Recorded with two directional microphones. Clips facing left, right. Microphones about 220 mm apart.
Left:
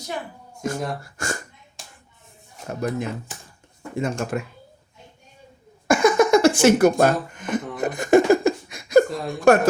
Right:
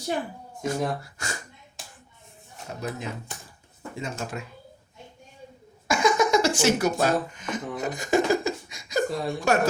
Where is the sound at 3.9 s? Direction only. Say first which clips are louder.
Left 8 dB; 55° left (ahead or behind).